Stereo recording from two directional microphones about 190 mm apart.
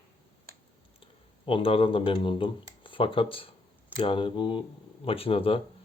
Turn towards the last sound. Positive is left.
turn(degrees=30)  # may be behind; listen again after turning